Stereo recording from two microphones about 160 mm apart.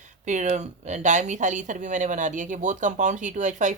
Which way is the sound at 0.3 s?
50° right (ahead or behind).